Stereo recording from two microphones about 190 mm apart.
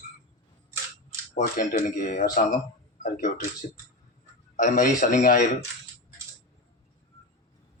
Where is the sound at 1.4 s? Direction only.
45° left (ahead or behind).